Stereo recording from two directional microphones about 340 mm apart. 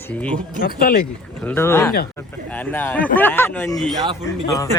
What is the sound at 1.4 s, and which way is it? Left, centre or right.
Speech, centre.